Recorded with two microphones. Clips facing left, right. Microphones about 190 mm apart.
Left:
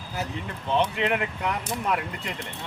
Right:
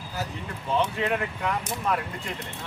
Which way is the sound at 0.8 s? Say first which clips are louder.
Left 1 dB; 20° left (ahead or behind).